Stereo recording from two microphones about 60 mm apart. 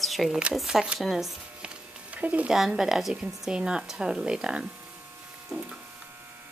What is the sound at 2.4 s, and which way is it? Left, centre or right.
Speech, centre.